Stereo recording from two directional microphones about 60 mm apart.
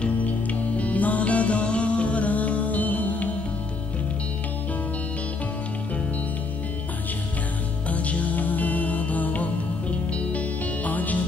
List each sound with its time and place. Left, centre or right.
0.0 s music: left
7.9 s music: left